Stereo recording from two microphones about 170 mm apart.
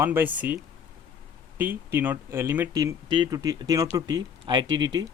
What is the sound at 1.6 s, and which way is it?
Speech, 10° right (ahead or behind).